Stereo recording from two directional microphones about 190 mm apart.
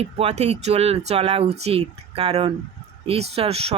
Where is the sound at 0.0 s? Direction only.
35° right (ahead or behind).